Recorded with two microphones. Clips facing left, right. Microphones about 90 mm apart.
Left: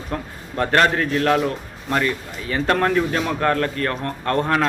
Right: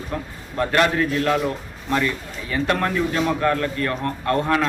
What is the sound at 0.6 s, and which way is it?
Speech, 45° left (ahead or behind).